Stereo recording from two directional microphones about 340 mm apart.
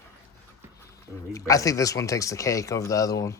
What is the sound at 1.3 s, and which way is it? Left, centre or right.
Speech, centre.